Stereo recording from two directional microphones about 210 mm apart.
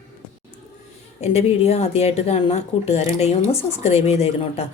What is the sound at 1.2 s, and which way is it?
A woman's voice, 30° left (ahead or behind).